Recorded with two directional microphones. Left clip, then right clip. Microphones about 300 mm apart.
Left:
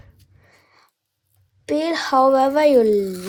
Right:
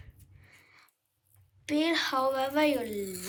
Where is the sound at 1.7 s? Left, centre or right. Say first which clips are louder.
Left 8 dB; left.